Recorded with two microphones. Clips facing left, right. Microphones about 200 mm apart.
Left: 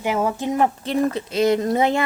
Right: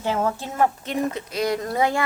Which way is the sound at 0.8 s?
30° left (ahead or behind).